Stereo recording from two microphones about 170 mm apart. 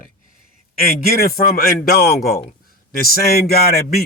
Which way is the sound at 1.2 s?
60° left (ahead or behind).